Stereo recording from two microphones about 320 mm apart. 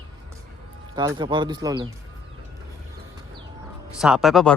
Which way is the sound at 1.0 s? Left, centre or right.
Centre.